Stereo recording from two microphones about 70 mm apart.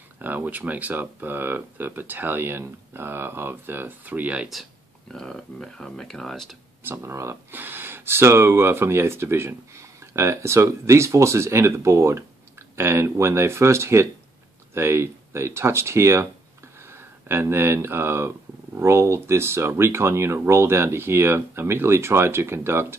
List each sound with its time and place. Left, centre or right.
0.2 s speech: right
5.1 s speech: centre
6.8 s speech: right
7.5 s speech: right